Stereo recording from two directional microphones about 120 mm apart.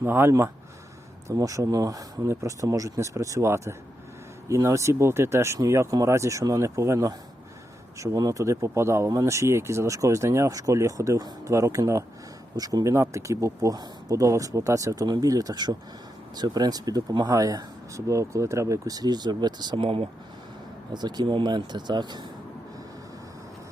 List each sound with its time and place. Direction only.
0.0 s speech: 20° right (ahead or behind); by 22.3 s 40° right (ahead or behind)